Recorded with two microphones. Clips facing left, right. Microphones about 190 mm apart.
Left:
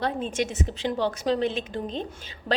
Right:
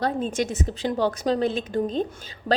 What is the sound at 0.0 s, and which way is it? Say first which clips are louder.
A woman's voice: right 2 dB; 40° right (ahead or behind).